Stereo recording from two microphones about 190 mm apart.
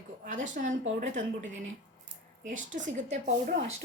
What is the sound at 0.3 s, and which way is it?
A woman's voice, 40° right (ahead or behind).